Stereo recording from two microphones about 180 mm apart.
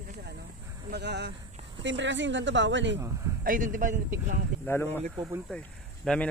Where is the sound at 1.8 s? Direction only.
90° right.